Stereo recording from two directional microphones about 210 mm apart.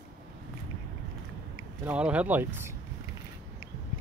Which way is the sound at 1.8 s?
5° right (ahead or behind).